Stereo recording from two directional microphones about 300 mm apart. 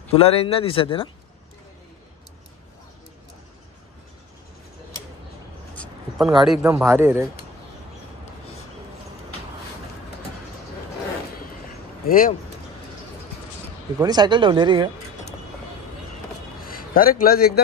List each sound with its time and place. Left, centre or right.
0.1 s speech: centre
6.1 s a man's voice: centre
12.1 s speech: left
13.9 s speech: centre
16.6 s a sound: left